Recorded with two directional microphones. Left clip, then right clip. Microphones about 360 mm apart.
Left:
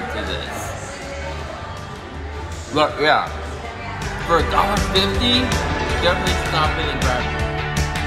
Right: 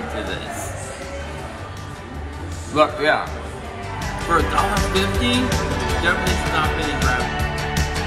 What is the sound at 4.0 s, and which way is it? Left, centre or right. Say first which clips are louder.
Music: left 1 dB; centre.